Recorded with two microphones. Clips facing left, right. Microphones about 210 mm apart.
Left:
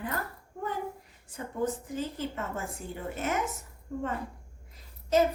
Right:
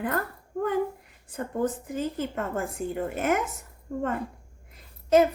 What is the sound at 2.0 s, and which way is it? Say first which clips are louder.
A woman's voice: right 7 dB; 50° right (ahead or behind).